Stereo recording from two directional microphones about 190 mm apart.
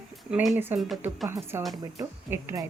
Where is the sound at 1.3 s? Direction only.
15° right (ahead or behind).